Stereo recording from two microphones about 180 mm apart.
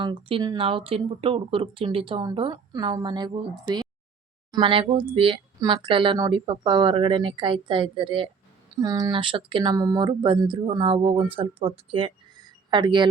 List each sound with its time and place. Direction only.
0.0 s speech: 30° right (ahead or behind)
4.5 s speech: 30° right (ahead or behind)